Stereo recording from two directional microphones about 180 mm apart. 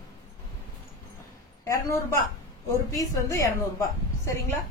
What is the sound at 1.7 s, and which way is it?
A woman's voice, 15° left (ahead or behind).